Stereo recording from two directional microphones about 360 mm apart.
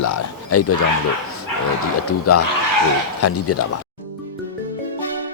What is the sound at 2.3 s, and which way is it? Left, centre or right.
Speech, left.